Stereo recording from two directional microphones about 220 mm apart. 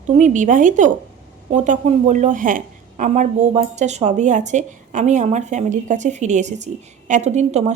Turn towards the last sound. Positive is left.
turn(degrees=-30)  # may be behind; listen again after turning